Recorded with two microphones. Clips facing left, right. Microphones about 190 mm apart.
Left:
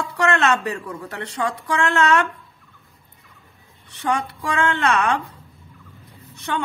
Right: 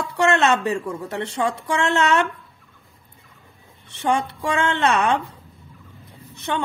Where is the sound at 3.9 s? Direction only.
25° right (ahead or behind).